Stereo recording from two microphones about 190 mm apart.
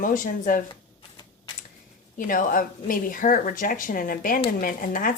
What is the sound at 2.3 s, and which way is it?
Speech, 45° left (ahead or behind).